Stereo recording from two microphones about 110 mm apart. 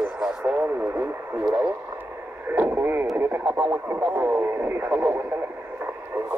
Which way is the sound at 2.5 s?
20° right (ahead or behind).